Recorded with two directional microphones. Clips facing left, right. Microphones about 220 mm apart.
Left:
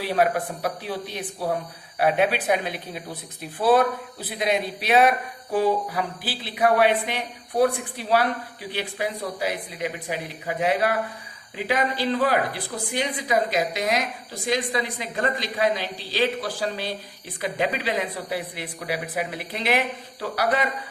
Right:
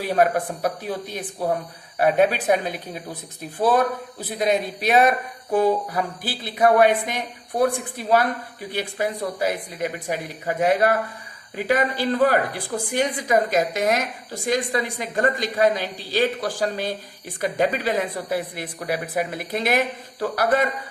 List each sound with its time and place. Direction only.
0.0 s a woman's voice: 45° right (ahead or behind)